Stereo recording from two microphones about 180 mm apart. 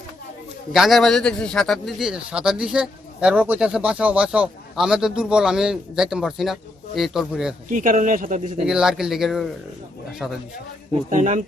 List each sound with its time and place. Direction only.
0.7 s a man's voice: centre (ahead or behind)
7.7 s speech: 45° right (ahead or behind)
8.6 s a man's voice: 5° right (ahead or behind)
11.1 s speech: 45° right (ahead or behind)